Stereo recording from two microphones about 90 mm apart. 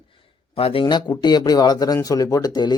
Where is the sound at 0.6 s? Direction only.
90° left.